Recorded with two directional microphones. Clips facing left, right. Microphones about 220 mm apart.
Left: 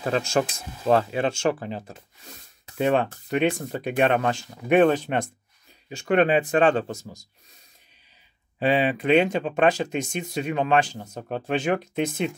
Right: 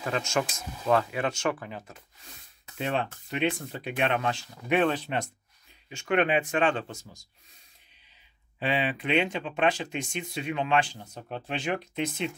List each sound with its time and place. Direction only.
0.0 s speech: 35° left (ahead or behind)
2.8 s speech: 50° left (ahead or behind)
8.5 s speech: 40° left (ahead or behind)